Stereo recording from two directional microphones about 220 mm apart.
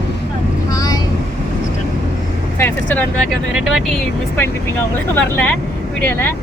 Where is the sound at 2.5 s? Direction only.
10° left (ahead or behind).